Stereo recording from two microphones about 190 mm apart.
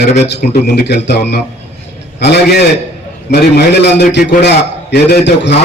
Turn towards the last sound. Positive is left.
turn(degrees=65)  # may be behind; listen again after turning